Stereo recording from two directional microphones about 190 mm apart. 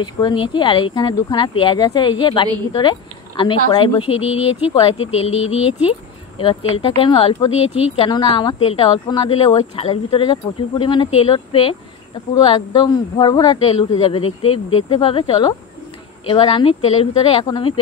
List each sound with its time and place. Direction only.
0.0 s speech: 25° left (ahead or behind)